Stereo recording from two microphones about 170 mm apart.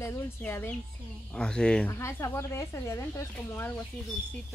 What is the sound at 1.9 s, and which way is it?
Speech, 15° left (ahead or behind).